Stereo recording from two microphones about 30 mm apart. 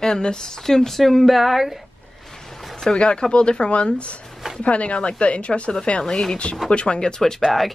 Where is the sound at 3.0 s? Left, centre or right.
Left.